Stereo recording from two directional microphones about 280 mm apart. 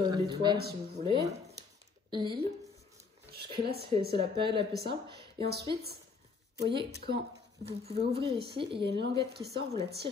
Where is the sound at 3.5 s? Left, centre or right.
Right.